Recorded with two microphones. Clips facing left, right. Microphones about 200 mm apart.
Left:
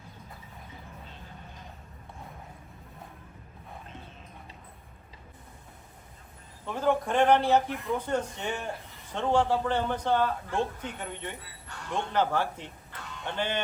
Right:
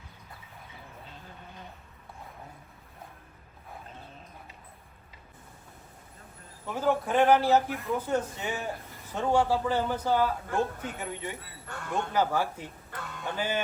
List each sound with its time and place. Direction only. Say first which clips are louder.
6.7 s a man's voice: even; 5° right (ahead or behind)
10.5 s speech: right 1 dB; 45° right (ahead or behind)
10.9 s speech: right 2 dB; 5° right (ahead or behind)
12.9 s a sound: right 3 dB; 50° right (ahead or behind)
13.2 s speech: even; 5° right (ahead or behind)